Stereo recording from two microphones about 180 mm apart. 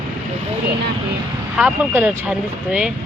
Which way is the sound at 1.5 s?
5° right (ahead or behind).